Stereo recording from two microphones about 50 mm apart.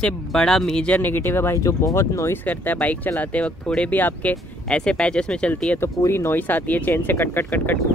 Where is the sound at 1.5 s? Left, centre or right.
Left.